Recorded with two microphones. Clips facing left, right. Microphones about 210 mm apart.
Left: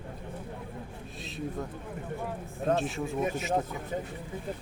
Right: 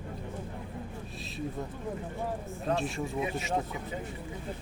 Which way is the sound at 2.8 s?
Centre (ahead or behind).